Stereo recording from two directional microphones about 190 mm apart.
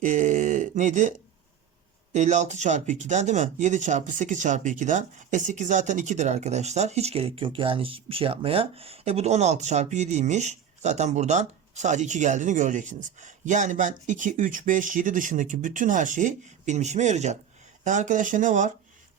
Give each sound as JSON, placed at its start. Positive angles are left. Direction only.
{"t": 0.0, "sound": "speech", "side_deg": -40}
{"t": 2.1, "sound": "speech", "side_deg": -40}